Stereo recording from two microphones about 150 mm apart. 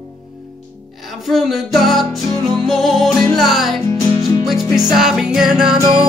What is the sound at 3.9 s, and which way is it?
Music, 20° left (ahead or behind).